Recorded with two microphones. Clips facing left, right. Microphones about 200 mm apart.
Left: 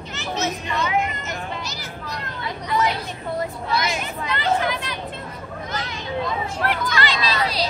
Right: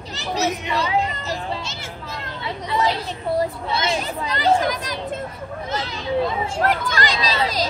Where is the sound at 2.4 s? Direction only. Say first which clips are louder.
Right 1 dB; 25° right (ahead or behind).